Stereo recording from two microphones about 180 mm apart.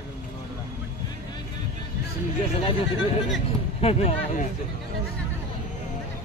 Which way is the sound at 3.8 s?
35° left (ahead or behind).